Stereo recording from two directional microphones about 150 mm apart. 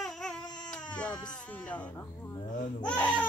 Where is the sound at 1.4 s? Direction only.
10° left (ahead or behind).